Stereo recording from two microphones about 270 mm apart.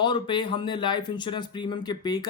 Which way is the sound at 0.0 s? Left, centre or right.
Centre.